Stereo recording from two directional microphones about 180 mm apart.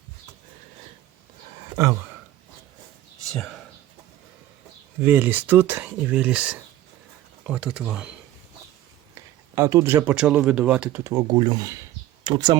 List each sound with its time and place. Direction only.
1.7 s speech: 15° right (ahead or behind)
3.2 s speech: centre (ahead or behind)
4.9 s speech: 10° right (ahead or behind)
9.1 s speech: 15° right (ahead or behind)
11.0 s speech: 20° right (ahead or behind)